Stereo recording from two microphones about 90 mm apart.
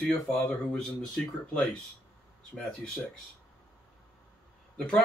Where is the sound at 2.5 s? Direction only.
5° left (ahead or behind).